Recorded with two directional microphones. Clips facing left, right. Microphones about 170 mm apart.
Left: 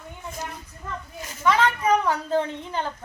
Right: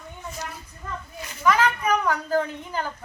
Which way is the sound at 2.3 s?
25° left (ahead or behind).